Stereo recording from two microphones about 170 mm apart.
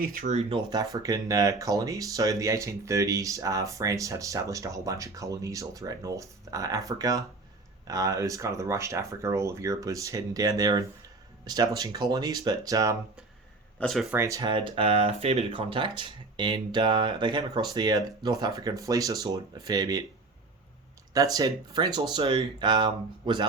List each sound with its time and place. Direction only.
0.0 s speech: 55° right (ahead or behind)
0.3 s speech: 25° right (ahead or behind)
13.7 s speech: centre (ahead or behind)
14.2 s speech: 20° right (ahead or behind)
21.1 s speech: 20° right (ahead or behind)